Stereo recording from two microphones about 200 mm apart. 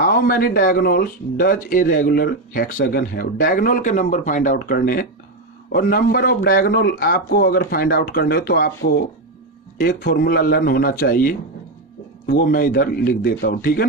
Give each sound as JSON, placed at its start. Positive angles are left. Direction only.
{"t": 0.0, "sound": "speech", "side_deg": 45}
{"t": 10.0, "sound": "speech", "side_deg": 45}